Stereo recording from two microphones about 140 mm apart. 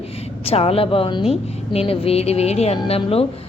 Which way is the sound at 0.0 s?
45° left (ahead or behind).